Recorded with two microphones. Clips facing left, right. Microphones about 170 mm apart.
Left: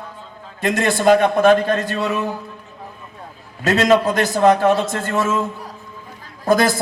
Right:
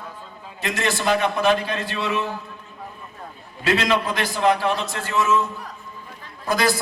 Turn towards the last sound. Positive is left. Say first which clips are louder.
# left 6 dB
turn(degrees=50)  # may be behind; listen again after turning